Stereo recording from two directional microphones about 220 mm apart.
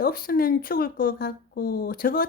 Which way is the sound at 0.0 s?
40° left (ahead or behind).